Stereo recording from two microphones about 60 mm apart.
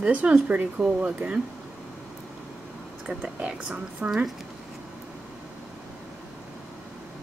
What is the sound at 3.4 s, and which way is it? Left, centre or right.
Speech, centre.